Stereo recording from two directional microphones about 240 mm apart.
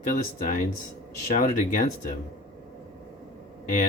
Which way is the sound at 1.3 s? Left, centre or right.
Left.